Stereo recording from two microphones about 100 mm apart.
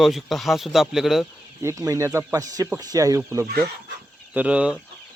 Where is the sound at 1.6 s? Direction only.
30° right (ahead or behind).